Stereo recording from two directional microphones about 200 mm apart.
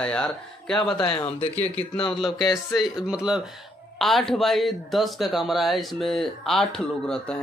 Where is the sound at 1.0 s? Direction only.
25° left (ahead or behind).